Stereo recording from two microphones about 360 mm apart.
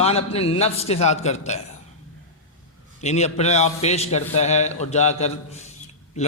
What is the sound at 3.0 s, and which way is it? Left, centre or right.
A man's voice, centre.